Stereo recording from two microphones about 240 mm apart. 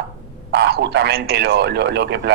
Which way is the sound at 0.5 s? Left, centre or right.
Right.